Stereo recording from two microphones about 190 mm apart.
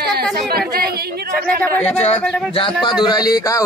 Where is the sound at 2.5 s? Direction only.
25° left (ahead or behind).